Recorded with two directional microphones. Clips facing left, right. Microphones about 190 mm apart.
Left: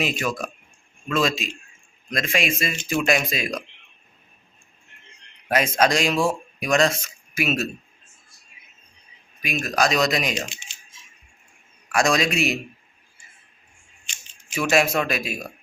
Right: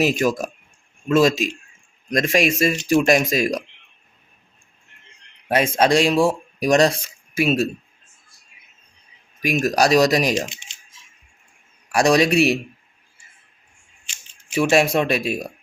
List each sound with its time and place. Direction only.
0.0 s speech: 40° right (ahead or behind)
5.5 s speech: 30° right (ahead or behind)
9.5 s speech: 40° right (ahead or behind)
11.9 s speech: 35° right (ahead or behind)
14.4 s speech: 30° right (ahead or behind)